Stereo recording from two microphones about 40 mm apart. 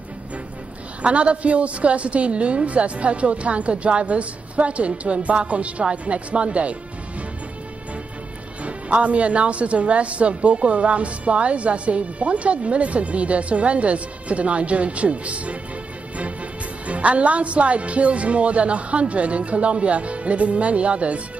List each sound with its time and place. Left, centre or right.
1.0 s speech: right
8.6 s speech: right
16.8 s speech: right